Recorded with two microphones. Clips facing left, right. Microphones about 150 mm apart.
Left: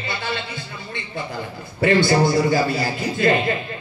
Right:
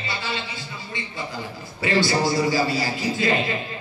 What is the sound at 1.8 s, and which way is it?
A man's voice, 55° left (ahead or behind).